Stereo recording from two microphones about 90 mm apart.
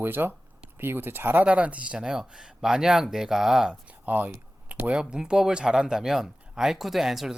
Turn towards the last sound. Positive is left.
turn(degrees=-5)  # may be behind; listen again after turning